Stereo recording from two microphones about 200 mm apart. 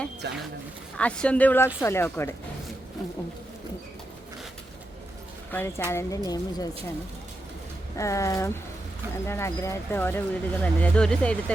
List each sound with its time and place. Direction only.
0.2 s speech: 60° right (ahead or behind)
0.9 s speech: 5° left (ahead or behind)
5.5 s speech: 10° left (ahead or behind)
7.9 s speech: 15° left (ahead or behind)